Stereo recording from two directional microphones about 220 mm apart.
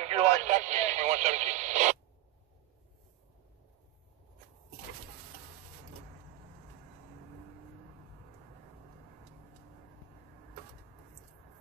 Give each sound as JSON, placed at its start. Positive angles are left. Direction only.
{"t": 0.0, "sound": "radio", "side_deg": -30}